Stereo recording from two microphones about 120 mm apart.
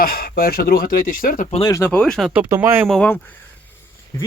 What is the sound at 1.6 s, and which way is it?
Speech, 25° left (ahead or behind).